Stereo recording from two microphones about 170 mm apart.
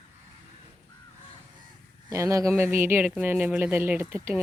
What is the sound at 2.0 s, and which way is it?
Speech, 20° right (ahead or behind).